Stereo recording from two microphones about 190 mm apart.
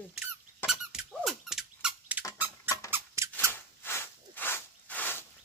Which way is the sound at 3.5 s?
10° left (ahead or behind).